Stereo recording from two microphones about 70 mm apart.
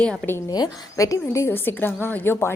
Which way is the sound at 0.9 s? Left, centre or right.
Left.